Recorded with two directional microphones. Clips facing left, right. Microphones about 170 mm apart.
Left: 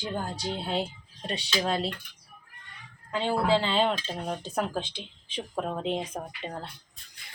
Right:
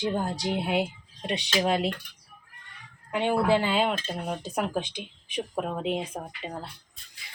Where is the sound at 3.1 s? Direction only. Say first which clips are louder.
Right 2 dB; 15° right (ahead or behind).